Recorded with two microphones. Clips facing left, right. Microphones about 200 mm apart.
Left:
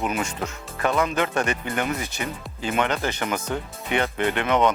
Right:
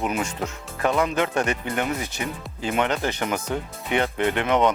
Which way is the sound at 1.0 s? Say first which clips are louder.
Even; 20° right (ahead or behind).